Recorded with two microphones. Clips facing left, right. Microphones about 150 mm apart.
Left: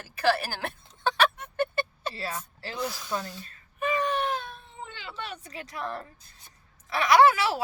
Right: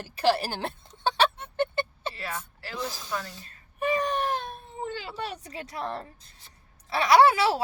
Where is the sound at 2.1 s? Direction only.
30° left (ahead or behind).